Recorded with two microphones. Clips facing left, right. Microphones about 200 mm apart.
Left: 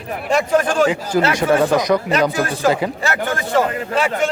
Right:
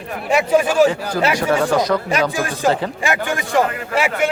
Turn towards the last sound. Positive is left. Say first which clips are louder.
# left 1 dB
turn(degrees=-10)  # may be behind; listen again after turning